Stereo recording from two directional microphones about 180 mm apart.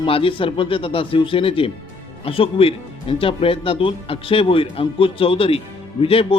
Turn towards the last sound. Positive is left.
turn(degrees=30)  # may be behind; listen again after turning